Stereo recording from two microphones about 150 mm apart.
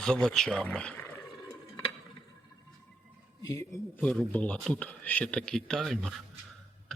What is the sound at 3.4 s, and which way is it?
Speech, 20° left (ahead or behind).